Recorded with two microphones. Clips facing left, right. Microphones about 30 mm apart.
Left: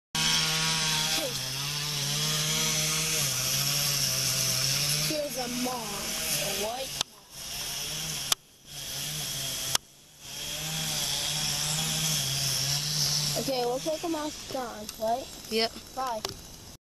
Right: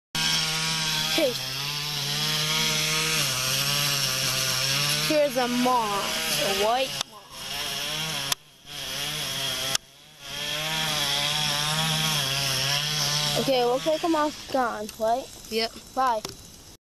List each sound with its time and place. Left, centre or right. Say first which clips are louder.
0.1 s chainsaw: right 1 dB; centre; by 7.0 s right
7.4 s chainsaw: right 6 dB; right
13.1 s a sound: right 5 dB; right
13.5 s speech: right 7 dB; right
15.5 s speech: right 1 dB; centre
15.9 s speech: right 8 dB; right